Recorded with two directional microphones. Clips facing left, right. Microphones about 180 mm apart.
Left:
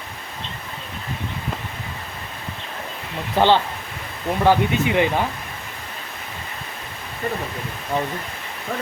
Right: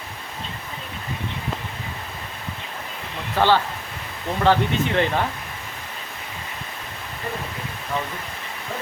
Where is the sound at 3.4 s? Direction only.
15° left (ahead or behind).